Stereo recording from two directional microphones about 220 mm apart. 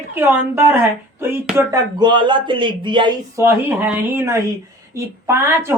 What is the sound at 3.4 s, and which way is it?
Speech, 10° right (ahead or behind).